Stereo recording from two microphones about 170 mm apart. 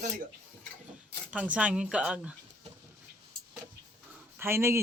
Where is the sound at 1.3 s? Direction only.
10° right (ahead or behind).